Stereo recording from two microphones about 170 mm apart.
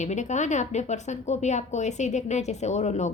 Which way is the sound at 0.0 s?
45° left (ahead or behind).